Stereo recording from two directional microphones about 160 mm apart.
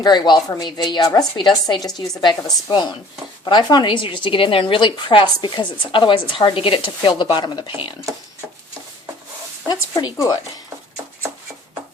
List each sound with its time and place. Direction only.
0.0 s a woman's voice: 25° left (ahead or behind)
9.6 s a woman's voice: 25° left (ahead or behind)